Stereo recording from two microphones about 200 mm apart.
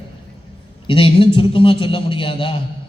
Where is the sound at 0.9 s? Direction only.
25° left (ahead or behind).